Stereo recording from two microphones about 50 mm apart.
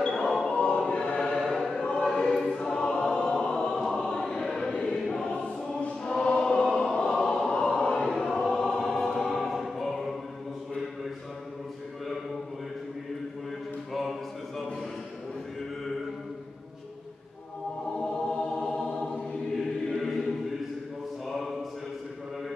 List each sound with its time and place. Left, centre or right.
0.0 s a sound: centre
0.4 s choir: centre
1.4 s chant: centre
1.8 s choir: centre
19.9 s choir: centre
21.3 s a sound: centre